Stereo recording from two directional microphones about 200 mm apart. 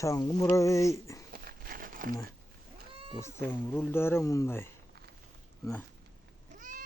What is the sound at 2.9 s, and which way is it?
Cat, 30° right (ahead or behind).